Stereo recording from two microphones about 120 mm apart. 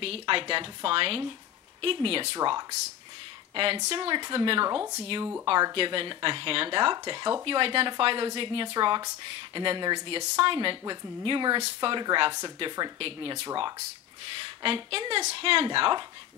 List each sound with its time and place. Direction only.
0.0 s speech: 50° right (ahead or behind)
2.3 s speech: 35° right (ahead or behind)
13.0 s speech: 50° right (ahead or behind)